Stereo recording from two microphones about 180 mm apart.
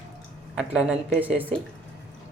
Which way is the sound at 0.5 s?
5° right (ahead or behind).